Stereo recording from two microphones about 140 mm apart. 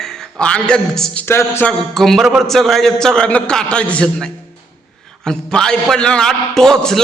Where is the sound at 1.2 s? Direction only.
15° left (ahead or behind).